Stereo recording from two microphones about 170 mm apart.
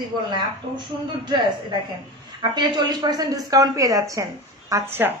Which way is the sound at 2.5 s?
25° right (ahead or behind).